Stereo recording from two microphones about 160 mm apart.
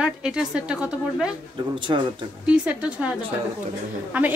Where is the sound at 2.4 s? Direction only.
5° right (ahead or behind).